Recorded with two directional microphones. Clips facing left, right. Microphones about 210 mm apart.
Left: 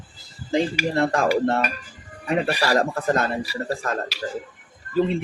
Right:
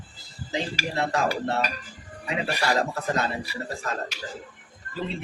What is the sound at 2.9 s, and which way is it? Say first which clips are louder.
Speech: left 5 dB; 50° left (ahead or behind).